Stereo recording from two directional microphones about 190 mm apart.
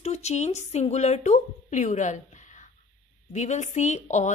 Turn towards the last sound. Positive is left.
turn(degrees=35)  # may be behind; listen again after turning